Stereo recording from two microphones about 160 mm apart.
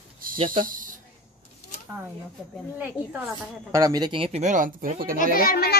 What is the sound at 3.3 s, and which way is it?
Speech, 20° right (ahead or behind).